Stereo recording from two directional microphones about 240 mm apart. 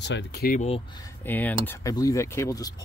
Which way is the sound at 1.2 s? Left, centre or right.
Centre.